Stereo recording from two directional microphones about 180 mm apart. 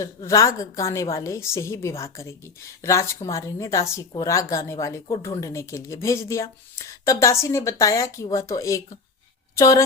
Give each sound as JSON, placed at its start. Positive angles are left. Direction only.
{"t": 0.0, "sound": "speech", "side_deg": 20}